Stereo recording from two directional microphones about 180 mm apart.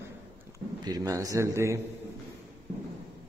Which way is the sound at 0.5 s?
20° right (ahead or behind).